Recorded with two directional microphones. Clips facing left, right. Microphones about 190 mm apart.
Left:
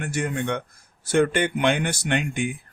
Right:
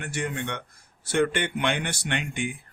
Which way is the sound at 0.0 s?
45° left (ahead or behind).